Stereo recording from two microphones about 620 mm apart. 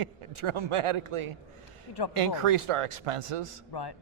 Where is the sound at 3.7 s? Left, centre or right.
Left.